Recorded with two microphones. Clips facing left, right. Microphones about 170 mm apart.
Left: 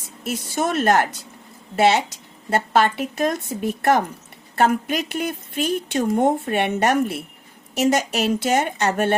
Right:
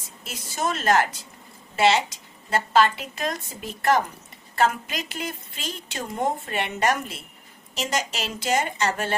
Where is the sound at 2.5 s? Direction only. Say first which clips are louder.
Left 2 dB; 60° left (ahead or behind).